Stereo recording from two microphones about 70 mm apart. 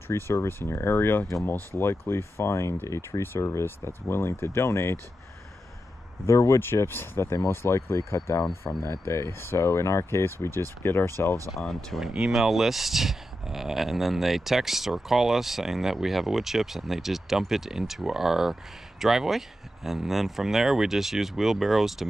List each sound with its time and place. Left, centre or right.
0.1 s speech: left
6.2 s speech: left
6.6 s speech: left
11.5 s speech: centre